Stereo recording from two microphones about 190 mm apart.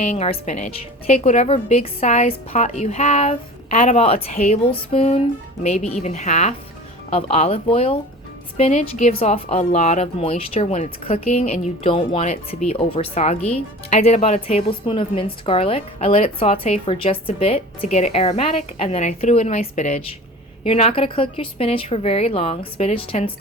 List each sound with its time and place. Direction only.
0.0 s a woman's voice: 35° left (ahead or behind)